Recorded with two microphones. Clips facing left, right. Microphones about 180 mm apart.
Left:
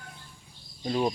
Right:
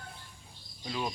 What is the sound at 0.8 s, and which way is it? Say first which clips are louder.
Speech: left 9 dB; 40° left (ahead or behind).